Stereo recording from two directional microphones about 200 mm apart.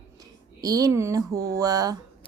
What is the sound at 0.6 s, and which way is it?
Speech, 20° right (ahead or behind).